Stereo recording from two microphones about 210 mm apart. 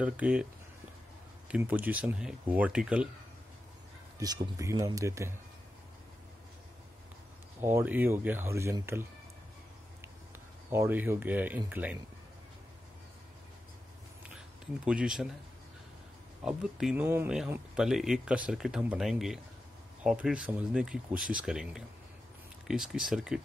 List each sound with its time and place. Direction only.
0.0 s speech: 5° right (ahead or behind)
1.5 s speech: 10° right (ahead or behind)
4.2 s speech: 20° right (ahead or behind)
7.6 s speech: 10° right (ahead or behind)
10.7 s speech: 10° right (ahead or behind)
14.9 s speech: 5° right (ahead or behind)
16.4 s speech: 5° right (ahead or behind)